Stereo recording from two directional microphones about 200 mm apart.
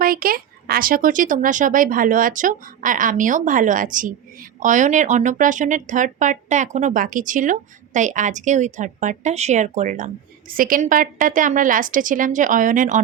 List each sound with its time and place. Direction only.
0.0 s speech: 45° right (ahead or behind)